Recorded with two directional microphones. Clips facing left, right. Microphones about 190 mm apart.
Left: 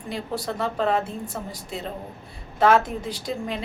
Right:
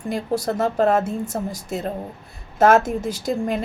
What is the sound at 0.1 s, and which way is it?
A woman's voice, 45° right (ahead or behind).